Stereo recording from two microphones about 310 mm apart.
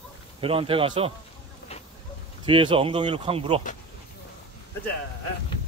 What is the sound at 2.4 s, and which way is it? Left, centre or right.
Speech, centre.